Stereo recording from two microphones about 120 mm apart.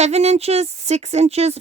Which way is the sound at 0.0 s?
65° right (ahead or behind).